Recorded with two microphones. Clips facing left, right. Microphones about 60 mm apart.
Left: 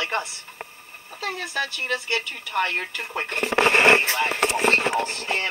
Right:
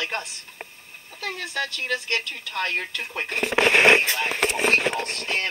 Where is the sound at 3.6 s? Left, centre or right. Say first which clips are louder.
Even; right.